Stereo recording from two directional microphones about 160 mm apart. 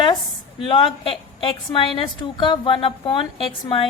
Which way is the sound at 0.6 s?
30° left (ahead or behind).